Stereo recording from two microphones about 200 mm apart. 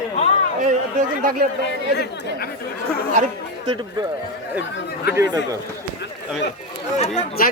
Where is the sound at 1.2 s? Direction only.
45° right (ahead or behind).